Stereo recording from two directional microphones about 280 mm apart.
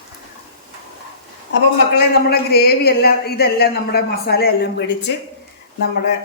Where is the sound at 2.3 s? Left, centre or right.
Left.